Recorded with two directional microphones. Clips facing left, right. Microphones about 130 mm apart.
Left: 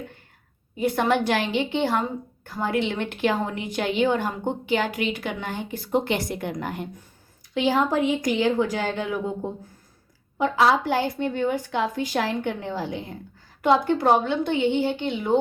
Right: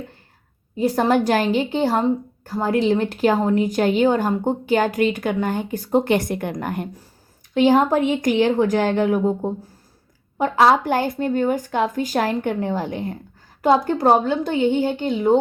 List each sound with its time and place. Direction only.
0.8 s a woman's voice: 40° right (ahead or behind)
10.3 s speech: 45° right (ahead or behind)
13.6 s speech: 40° right (ahead or behind)